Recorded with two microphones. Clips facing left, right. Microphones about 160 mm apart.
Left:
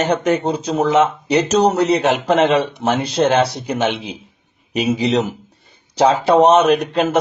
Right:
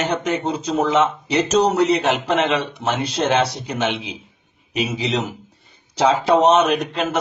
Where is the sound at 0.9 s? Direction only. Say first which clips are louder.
Left 6 dB; 55° left (ahead or behind).